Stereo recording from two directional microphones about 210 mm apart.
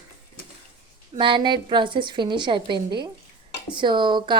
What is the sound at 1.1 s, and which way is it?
A woman's voice, 20° right (ahead or behind).